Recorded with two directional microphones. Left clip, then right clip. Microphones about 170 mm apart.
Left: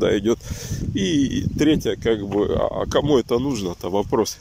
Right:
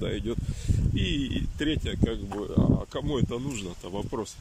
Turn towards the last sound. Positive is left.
turn(degrees=35)  # may be behind; listen again after turning